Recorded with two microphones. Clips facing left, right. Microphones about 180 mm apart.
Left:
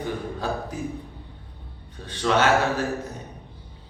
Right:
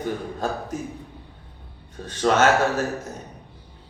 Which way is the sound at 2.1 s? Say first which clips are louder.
Right 2 dB; 45° right (ahead or behind).